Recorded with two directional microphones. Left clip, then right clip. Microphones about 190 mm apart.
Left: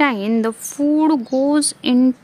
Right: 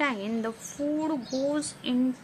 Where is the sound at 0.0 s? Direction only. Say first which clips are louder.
Left 11 dB; 65° left (ahead or behind).